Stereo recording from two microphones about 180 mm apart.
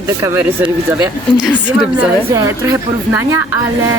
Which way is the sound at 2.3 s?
20° right (ahead or behind).